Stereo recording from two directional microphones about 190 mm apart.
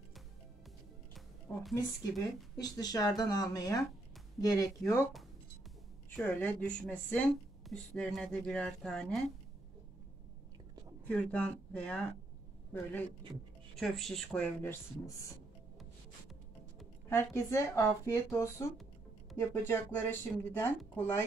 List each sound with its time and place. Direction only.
1.1 s music: centre (ahead or behind)
2.1 s speech: 20° left (ahead or behind)
6.0 s speech: 10° left (ahead or behind)
11.1 s speech: 5° left (ahead or behind)
13.3 s speech: centre (ahead or behind)
17.1 s speech: 15° left (ahead or behind)